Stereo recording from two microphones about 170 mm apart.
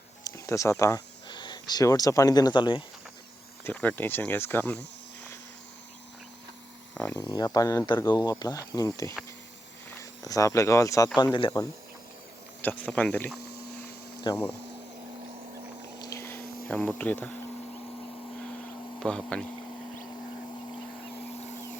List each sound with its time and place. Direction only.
0.3 s speech: 20° left (ahead or behind)
3.6 s speech: 10° left (ahead or behind)
6.9 s speech: 5° left (ahead or behind)
7.2 s speech: 25° left (ahead or behind)
10.0 s speech: 20° left (ahead or behind)
12.6 s speech: 10° left (ahead or behind)
16.0 s a sound: 20° left (ahead or behind)
16.6 s speech: 10° left (ahead or behind)
18.9 s speech: 5° left (ahead or behind)